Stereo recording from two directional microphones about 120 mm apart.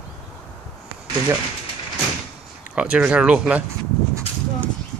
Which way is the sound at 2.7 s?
10° right (ahead or behind).